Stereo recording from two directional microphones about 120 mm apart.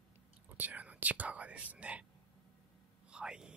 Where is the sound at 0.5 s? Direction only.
15° right (ahead or behind).